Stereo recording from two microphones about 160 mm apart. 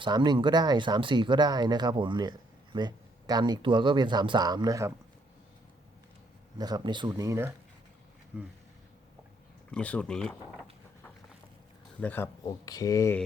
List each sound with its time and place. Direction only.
0.0 s speech: 30° right (ahead or behind)
6.6 s speech: 25° right (ahead or behind)
7.2 s speech: 15° right (ahead or behind)
8.3 s speech: 5° right (ahead or behind)
9.7 s speech: 5° left (ahead or behind)
11.9 s speech: 10° left (ahead or behind)
12.5 s speech: 25° left (ahead or behind)